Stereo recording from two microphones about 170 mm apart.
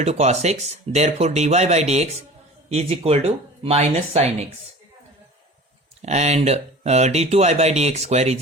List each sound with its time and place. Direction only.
0.0 s speech: 40° right (ahead or behind)
6.0 s speech: 40° right (ahead or behind)